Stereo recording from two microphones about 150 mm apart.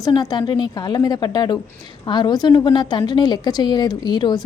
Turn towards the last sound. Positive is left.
turn(degrees=30)  # may be behind; listen again after turning